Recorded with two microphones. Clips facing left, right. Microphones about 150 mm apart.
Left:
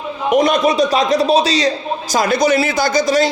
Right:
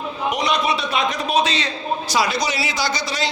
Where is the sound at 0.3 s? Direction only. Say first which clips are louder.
Left 8 dB; 50° left (ahead or behind).